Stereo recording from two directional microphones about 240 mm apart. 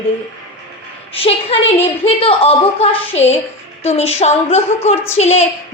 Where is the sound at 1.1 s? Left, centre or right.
Left.